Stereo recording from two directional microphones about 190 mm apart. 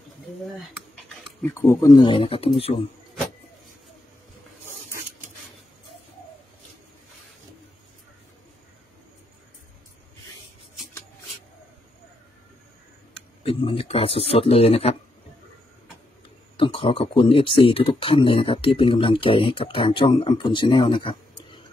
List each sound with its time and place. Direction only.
0.6 s speech: centre (ahead or behind)
1.5 s speech: 15° left (ahead or behind)
13.4 s a man's voice: 30° left (ahead or behind)
16.5 s speech: 25° left (ahead or behind)